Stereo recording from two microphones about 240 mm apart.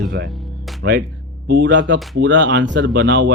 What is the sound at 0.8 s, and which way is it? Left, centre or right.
Speech, right.